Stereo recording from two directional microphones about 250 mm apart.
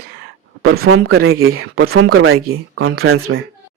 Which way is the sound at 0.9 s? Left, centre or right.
Right.